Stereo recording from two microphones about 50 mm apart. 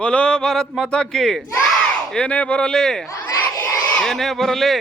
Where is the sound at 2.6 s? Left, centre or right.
Centre.